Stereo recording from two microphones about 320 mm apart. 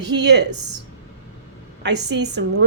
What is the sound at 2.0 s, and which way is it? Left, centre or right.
Speech, right.